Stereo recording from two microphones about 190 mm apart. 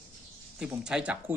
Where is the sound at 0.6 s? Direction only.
5° right (ahead or behind).